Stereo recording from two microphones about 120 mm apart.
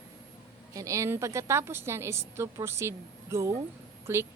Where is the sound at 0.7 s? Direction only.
25° right (ahead or behind).